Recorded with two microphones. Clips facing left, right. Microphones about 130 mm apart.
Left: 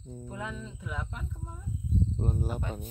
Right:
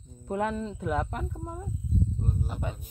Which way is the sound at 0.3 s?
60° right (ahead or behind).